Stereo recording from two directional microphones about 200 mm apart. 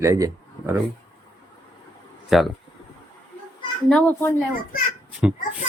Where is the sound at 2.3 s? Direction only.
Centre (ahead or behind).